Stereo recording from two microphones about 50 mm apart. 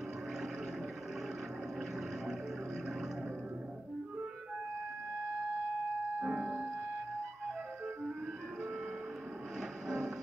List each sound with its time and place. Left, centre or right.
6.1 s music: right
9.6 s music: centre